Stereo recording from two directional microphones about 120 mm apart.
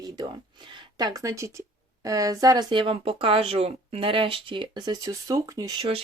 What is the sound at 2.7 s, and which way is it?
Speech, 45° right (ahead or behind).